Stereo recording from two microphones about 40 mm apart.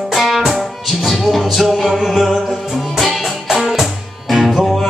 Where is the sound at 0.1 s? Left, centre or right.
Centre.